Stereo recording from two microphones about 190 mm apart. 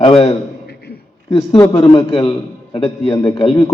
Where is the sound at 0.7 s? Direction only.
55° left (ahead or behind).